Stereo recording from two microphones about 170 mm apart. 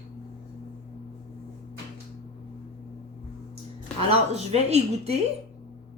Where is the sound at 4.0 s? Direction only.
35° right (ahead or behind).